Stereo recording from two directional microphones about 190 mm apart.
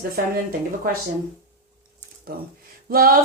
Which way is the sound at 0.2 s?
50° right (ahead or behind).